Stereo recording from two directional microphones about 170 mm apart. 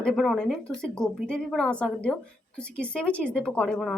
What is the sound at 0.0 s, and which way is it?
A woman's voice, centre (ahead or behind).